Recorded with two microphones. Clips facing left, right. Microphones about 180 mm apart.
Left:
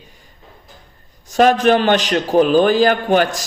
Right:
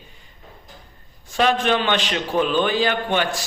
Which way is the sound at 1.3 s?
45° left (ahead or behind).